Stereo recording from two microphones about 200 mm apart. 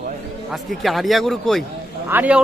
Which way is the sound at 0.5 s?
Centre (ahead or behind).